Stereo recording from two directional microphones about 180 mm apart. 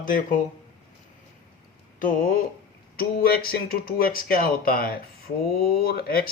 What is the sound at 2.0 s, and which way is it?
Speech, 50° left (ahead or behind).